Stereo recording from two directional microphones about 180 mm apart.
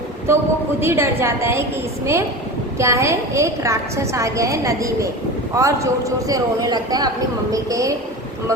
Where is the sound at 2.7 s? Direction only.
15° right (ahead or behind).